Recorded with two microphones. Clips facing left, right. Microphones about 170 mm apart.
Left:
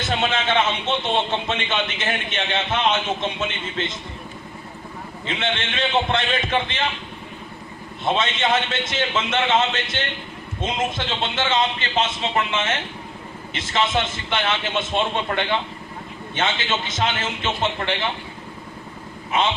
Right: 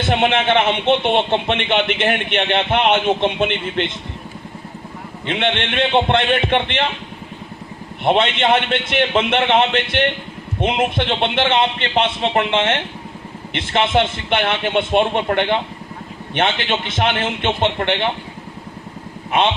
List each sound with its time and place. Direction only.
0.0 s a man's voice: 60° right (ahead or behind)
5.2 s a man's voice: 60° right (ahead or behind)
8.0 s a man's voice: 60° right (ahead or behind)
19.3 s a man's voice: 60° right (ahead or behind)